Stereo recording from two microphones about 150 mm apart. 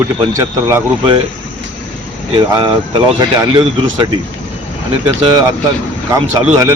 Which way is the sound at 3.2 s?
30° right (ahead or behind).